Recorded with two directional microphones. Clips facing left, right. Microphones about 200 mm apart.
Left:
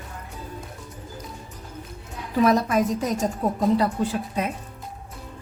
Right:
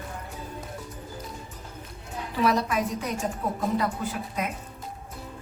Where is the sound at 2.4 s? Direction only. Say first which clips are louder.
Left 5 dB; 45° left (ahead or behind).